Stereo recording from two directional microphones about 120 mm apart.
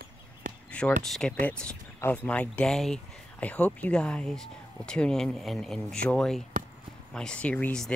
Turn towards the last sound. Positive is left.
turn(degrees=10)  # may be behind; listen again after turning